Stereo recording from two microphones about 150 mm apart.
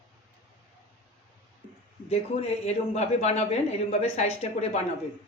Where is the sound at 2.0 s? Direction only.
45° left (ahead or behind).